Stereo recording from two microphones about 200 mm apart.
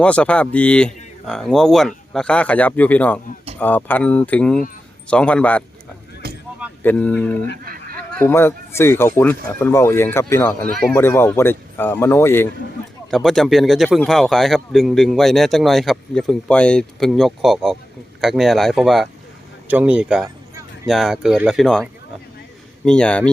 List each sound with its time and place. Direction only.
0.0 s speech: 5° left (ahead or behind)
6.2 s a sound: 50° right (ahead or behind)
6.8 s speech: 5° left (ahead or behind)
7.6 s a sound: 45° right (ahead or behind)
7.9 s speech: 10° left (ahead or behind)
22.9 s speech: 5° left (ahead or behind)